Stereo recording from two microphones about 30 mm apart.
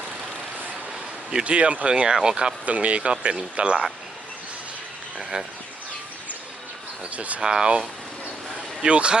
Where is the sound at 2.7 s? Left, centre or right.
Right.